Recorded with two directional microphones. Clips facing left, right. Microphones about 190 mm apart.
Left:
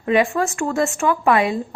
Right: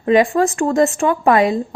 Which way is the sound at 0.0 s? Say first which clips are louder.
Right 4 dB; 35° right (ahead or behind).